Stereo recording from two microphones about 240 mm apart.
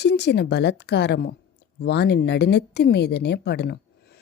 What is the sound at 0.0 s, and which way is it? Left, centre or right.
Speech, left.